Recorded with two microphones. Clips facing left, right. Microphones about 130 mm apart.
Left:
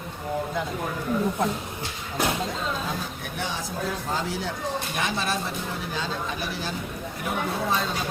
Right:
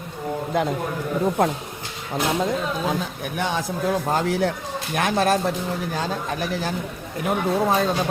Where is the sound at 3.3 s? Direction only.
60° right (ahead or behind).